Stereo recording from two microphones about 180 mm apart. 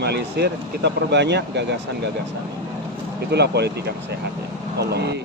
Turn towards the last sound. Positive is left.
turn(degrees=-70)  # may be behind; listen again after turning